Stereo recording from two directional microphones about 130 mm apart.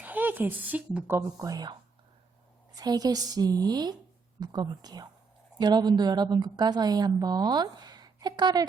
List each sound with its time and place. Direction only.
0.0 s a woman's voice: 15° right (ahead or behind)
1.2 s a woman's voice: 30° right (ahead or behind)
2.7 s a woman's voice: 30° right (ahead or behind)